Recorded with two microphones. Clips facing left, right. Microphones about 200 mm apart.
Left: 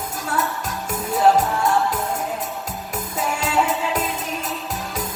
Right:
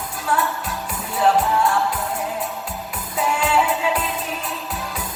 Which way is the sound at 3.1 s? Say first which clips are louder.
Right 2 dB; 45° left (ahead or behind).